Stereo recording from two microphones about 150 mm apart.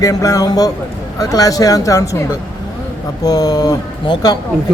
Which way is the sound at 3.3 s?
25° left (ahead or behind).